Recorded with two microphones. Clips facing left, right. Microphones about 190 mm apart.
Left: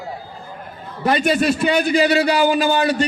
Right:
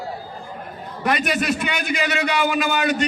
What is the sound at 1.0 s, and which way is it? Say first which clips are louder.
A man's voice: left 5 dB; 30° left (ahead or behind).